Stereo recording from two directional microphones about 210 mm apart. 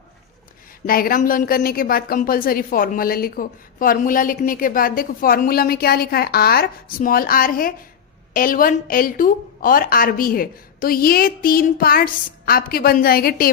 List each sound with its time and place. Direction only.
0.9 s a woman's voice: 45° left (ahead or behind)